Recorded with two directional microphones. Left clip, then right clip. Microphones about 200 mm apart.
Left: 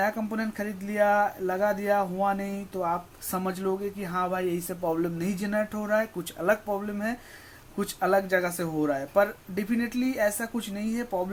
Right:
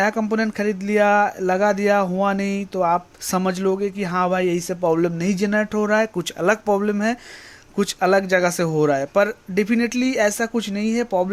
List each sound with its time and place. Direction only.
0.0 s speech: 45° right (ahead or behind)